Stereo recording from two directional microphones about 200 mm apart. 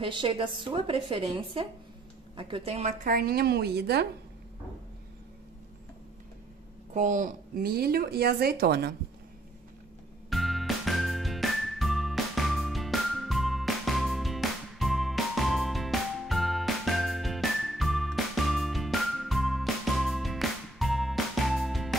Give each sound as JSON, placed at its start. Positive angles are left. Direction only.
{"t": 0.0, "sound": "a woman's voice", "side_deg": -25}
{"t": 6.9, "sound": "speech", "side_deg": -40}
{"t": 10.3, "sound": "music", "side_deg": 0}